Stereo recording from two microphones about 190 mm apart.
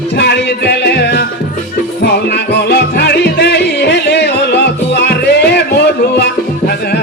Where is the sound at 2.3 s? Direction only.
60° left (ahead or behind).